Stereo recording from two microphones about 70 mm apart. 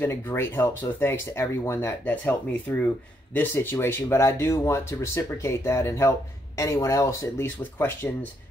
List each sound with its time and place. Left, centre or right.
0.0 s speech: left
2.0 s speech: left
3.7 s speech: left
7.4 s speech: left